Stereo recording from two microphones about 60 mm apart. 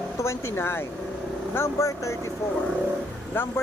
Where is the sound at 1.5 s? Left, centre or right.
Left.